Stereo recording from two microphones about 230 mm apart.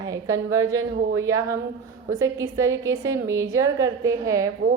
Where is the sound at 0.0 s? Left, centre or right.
Centre.